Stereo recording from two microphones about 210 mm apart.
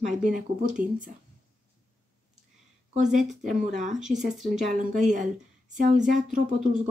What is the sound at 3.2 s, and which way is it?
Speech, centre (ahead or behind).